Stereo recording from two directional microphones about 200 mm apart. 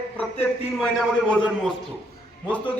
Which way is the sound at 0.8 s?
5° left (ahead or behind).